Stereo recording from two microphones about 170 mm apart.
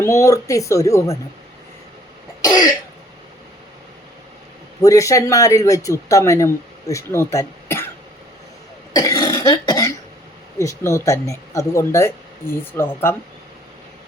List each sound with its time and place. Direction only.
0.0 s speech: 15° left (ahead or behind)
2.4 s speech: 20° left (ahead or behind)
4.8 s speech: 20° left (ahead or behind)
8.9 s cough: 20° left (ahead or behind)
10.6 s speech: 15° left (ahead or behind)